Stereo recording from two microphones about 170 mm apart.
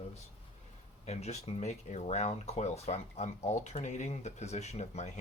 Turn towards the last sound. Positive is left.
turn(degrees=40)  # may be behind; listen again after turning